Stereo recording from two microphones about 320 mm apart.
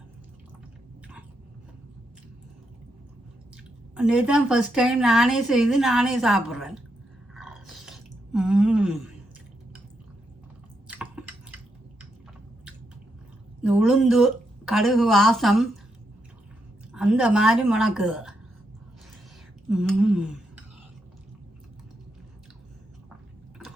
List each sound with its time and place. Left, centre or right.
3.9 s a woman's voice: centre
7.3 s a sound: centre
10.8 s chewing: centre
13.6 s a woman's voice: centre
16.9 s a woman's voice: centre
19.7 s a woman's voice: centre